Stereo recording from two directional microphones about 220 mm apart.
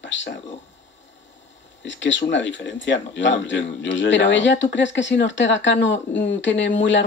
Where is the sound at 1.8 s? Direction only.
55° left (ahead or behind).